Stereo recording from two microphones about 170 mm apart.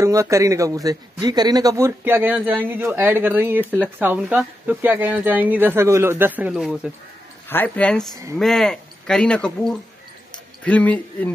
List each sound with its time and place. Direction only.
0.0 s a man's voice: 20° right (ahead or behind)
7.4 s speech: 10° left (ahead or behind)